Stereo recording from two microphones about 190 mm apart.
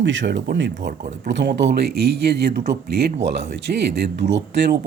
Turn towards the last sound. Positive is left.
turn(degrees=-60)  # may be behind; listen again after turning